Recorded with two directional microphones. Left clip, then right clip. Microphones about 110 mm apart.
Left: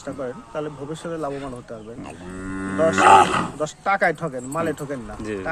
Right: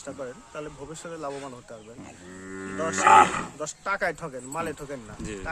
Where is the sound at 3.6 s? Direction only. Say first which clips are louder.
Left 8 dB; 15° right (ahead or behind).